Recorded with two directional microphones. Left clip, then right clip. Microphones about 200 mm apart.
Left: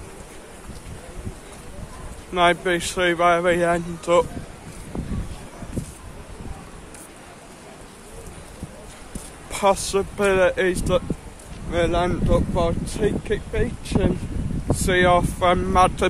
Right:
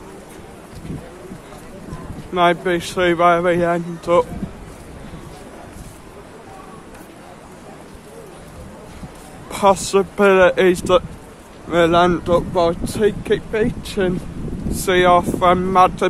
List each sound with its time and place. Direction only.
2.3 s speech: centre (ahead or behind)
9.5 s speech: 5° right (ahead or behind)
14.8 s speech: 5° right (ahead or behind)